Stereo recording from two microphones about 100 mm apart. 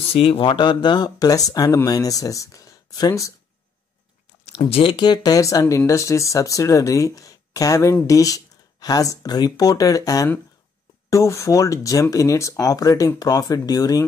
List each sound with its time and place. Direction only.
0.0 s speech: 75° left (ahead or behind); by 3.3 s 30° left (ahead or behind)
4.5 s speech: 75° left (ahead or behind)
4.9 s speech: 45° left (ahead or behind)